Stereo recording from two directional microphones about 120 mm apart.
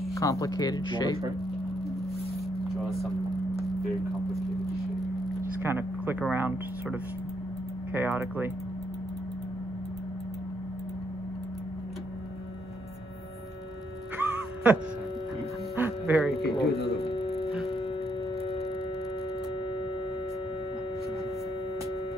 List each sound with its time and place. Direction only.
0.1 s speech: 25° left (ahead or behind)
5.6 s speech: 15° right (ahead or behind)
14.1 s music: 15° right (ahead or behind)
16.5 s a sound: 50° left (ahead or behind)